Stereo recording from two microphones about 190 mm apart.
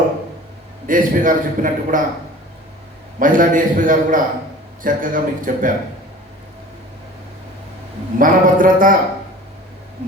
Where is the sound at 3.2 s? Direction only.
45° right (ahead or behind).